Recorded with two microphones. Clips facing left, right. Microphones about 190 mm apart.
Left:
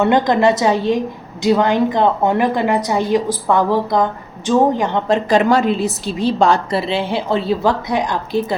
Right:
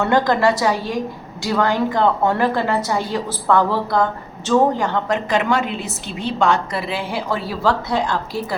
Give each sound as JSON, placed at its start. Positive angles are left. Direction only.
{"t": 0.0, "sound": "a woman's voice", "side_deg": 20}